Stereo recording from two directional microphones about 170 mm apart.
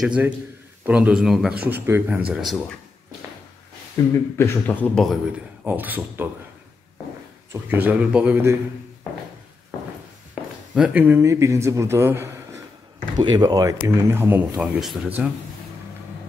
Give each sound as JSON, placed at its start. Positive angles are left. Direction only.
{"t": 0.0, "sound": "a man's voice", "side_deg": -5}
{"t": 1.5, "sound": "speech", "side_deg": -65}
{"t": 1.9, "sound": "a man's voice", "side_deg": -10}
{"t": 4.1, "sound": "speech", "side_deg": 15}
{"t": 7.5, "sound": "a man's voice", "side_deg": -10}
{"t": 10.7, "sound": "a man's voice", "side_deg": -5}
{"t": 14.6, "sound": "speech", "side_deg": 0}